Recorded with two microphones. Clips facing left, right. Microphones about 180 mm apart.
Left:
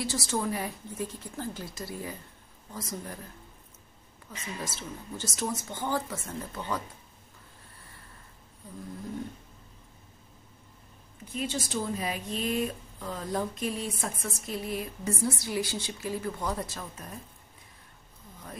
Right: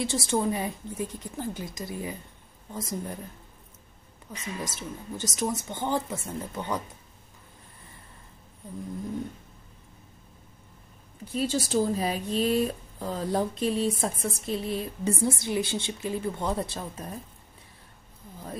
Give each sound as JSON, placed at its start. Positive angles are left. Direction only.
{"t": 0.0, "sound": "a woman's voice", "side_deg": -25}
{"t": 4.4, "sound": "a woman's voice", "side_deg": -15}
{"t": 11.3, "sound": "a woman's voice", "side_deg": -35}